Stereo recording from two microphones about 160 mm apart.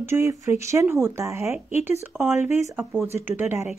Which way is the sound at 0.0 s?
15° right (ahead or behind).